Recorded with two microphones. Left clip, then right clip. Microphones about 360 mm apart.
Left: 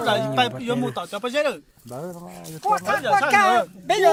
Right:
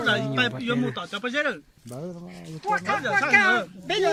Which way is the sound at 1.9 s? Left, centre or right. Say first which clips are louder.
Left 4 dB; left.